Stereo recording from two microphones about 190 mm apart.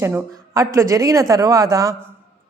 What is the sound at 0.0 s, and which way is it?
A man's voice, 15° right (ahead or behind).